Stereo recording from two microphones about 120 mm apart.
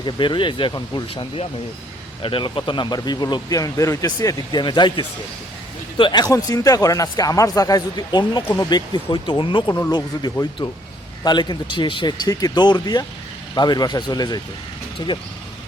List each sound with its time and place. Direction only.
0.0 s speech: 40° left (ahead or behind)